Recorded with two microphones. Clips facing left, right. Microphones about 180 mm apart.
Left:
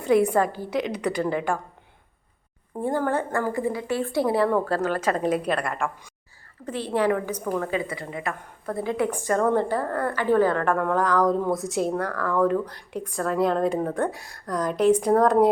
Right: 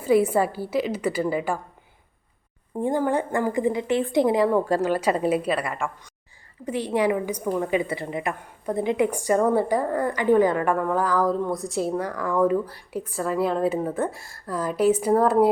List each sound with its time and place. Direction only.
0.0 s speech: 5° right (ahead or behind)
2.8 s a woman's voice: 15° right (ahead or behind)